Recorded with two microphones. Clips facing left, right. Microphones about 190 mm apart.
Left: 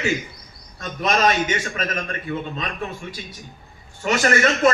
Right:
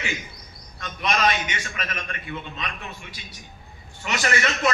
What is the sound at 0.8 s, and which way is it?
A man's voice, 40° left (ahead or behind).